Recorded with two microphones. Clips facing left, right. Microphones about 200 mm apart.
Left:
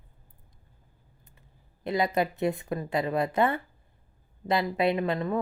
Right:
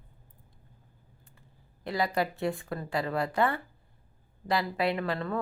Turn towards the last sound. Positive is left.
turn(degrees=20)  # may be behind; listen again after turning